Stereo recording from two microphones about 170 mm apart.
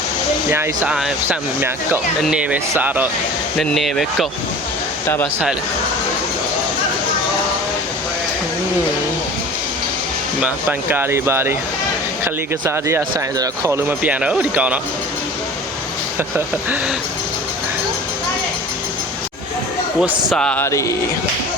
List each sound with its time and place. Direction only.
0.5 s speech: 15° right (ahead or behind)
0.9 s speech: centre (ahead or behind)
3.6 s speech: centre (ahead or behind)
5.0 s speech: 15° left (ahead or behind)
10.4 s speech: 10° right (ahead or behind)
20.0 s speech: centre (ahead or behind); by 20.9 s 15° left (ahead or behind)